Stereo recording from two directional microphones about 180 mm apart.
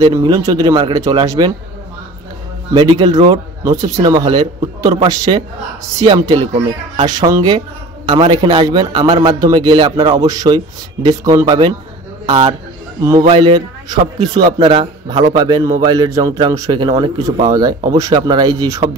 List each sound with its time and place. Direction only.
0.0 s a man's voice: 20° right (ahead or behind)
2.7 s a man's voice: 25° right (ahead or behind)